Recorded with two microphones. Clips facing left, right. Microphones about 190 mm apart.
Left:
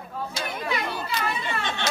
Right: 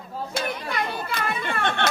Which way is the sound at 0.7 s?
55° right (ahead or behind).